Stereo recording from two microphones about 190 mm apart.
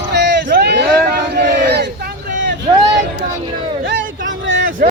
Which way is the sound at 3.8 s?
75° right (ahead or behind).